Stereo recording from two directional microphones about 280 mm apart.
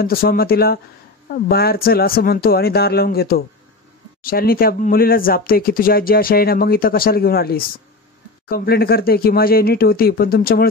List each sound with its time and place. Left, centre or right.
0.0 s speech: left